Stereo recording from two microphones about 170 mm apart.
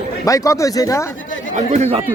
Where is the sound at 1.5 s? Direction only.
40° right (ahead or behind).